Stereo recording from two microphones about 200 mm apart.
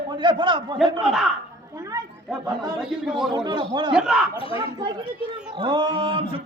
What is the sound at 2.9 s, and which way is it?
Speech, centre (ahead or behind).